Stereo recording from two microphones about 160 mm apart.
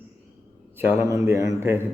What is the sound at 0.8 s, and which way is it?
Speech, 15° right (ahead or behind).